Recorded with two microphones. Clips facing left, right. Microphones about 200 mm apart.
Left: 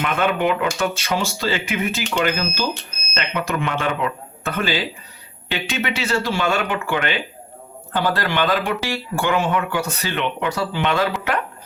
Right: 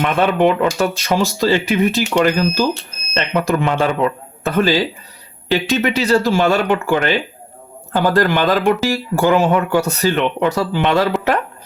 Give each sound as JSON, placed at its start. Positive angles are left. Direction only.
{"t": 0.0, "sound": "speech", "side_deg": -35}